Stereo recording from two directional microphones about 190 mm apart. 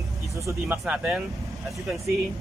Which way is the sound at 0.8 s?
5° right (ahead or behind).